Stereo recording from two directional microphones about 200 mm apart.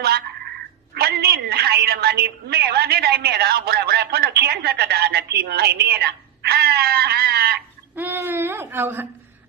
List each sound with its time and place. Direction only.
0.9 s a woman's voice: 55° right (ahead or behind)
7.9 s speech: 10° right (ahead or behind)